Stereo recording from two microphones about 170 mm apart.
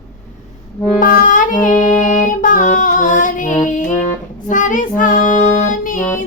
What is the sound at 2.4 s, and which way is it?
Female singing, 50° left (ahead or behind).